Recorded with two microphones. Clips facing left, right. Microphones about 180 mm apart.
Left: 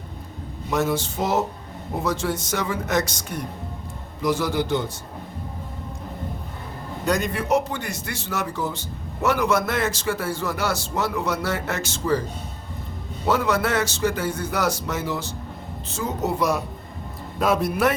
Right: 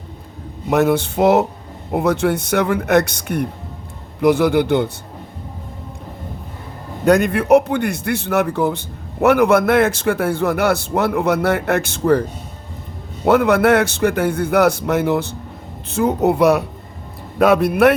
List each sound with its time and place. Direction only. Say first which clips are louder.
0.7 s a man's voice: right 8 dB; 60° right (ahead or behind)
7.0 s a man's voice: right 9 dB; 60° right (ahead or behind)
13.2 s a man's voice: right 9 dB; 60° right (ahead or behind)